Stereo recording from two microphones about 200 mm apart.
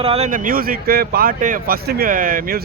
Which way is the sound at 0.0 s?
30° right (ahead or behind).